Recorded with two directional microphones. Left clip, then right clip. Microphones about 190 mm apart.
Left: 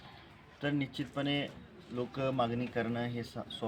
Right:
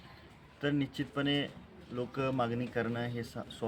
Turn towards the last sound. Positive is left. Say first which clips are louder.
# even
turn(degrees=-10)  # may be behind; listen again after turning